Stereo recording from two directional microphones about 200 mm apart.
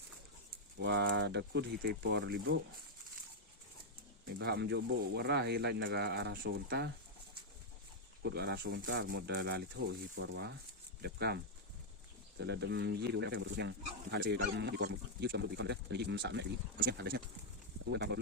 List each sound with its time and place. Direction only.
0.8 s speech: 55° right (ahead or behind)
4.4 s speech: 60° right (ahead or behind)
8.2 s speech: 55° right (ahead or behind)